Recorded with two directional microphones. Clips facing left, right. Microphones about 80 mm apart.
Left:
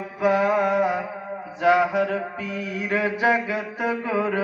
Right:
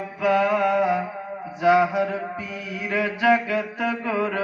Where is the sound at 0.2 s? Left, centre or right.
Centre.